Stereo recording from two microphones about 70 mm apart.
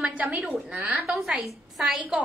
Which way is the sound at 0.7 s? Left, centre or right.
Centre.